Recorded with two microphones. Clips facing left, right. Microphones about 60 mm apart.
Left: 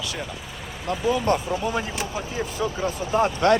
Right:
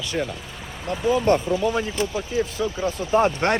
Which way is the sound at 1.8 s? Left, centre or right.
Centre.